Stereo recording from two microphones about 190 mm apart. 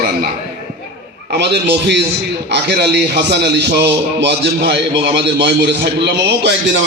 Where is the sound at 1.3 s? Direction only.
60° right (ahead or behind).